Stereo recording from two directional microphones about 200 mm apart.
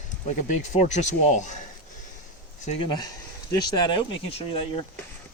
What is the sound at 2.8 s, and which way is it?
Speech, 20° left (ahead or behind).